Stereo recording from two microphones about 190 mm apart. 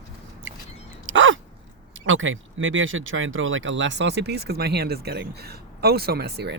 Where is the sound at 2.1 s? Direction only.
90° right; by 6.6 s 60° right (ahead or behind).